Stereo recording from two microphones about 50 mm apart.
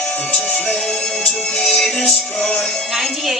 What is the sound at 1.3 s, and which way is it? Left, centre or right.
Music, centre.